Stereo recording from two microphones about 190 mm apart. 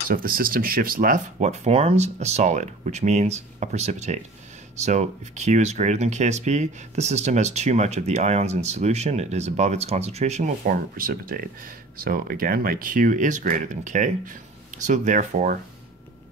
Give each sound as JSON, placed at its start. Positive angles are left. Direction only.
{"t": 0.1, "sound": "speech", "side_deg": -50}